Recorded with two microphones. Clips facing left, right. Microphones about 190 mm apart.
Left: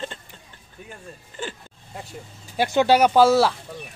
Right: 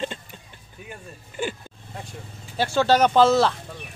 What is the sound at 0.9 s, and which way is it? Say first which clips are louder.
Speech: right 1 dB; 15° right (ahead or behind).